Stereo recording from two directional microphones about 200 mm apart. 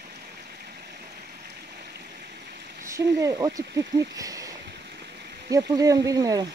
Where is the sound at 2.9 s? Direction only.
15° right (ahead or behind).